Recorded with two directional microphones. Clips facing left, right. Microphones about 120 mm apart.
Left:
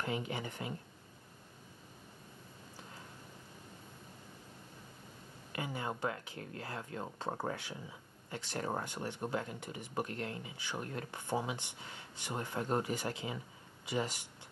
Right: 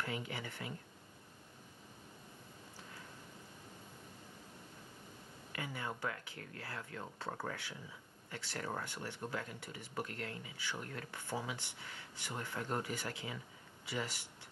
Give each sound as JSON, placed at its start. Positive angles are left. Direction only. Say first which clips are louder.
{"t": 0.0, "sound": "a woman's voice", "louder": "left 4 dB", "side_deg": 25}
{"t": 5.5, "sound": "speech", "louder": "left 4 dB", "side_deg": 25}